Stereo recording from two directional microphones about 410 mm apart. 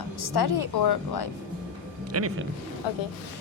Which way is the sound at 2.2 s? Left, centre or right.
Right.